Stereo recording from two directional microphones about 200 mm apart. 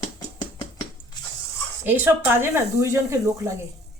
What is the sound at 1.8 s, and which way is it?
Speech, 10° right (ahead or behind).